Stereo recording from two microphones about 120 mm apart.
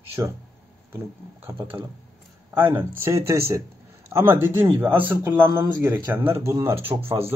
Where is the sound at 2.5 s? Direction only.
15° right (ahead or behind).